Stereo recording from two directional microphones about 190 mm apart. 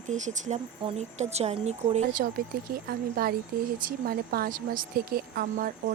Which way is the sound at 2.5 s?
50° right (ahead or behind).